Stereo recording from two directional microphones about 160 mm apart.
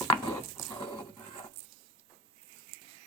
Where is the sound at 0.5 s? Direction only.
25° left (ahead or behind).